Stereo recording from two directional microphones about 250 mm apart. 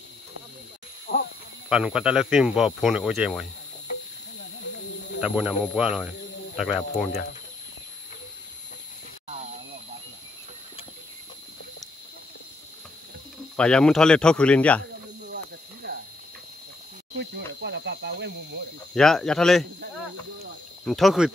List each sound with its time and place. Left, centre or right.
1.7 s speech: centre
5.2 s speech: centre
13.6 s speech: centre
15.2 s a sound: right
17.2 s speech: right
18.9 s speech: centre
20.8 s speech: centre